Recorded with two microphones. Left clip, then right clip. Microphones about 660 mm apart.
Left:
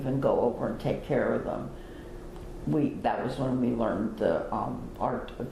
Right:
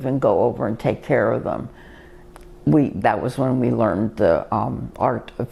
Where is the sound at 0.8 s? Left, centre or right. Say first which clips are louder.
Right 12 dB; right.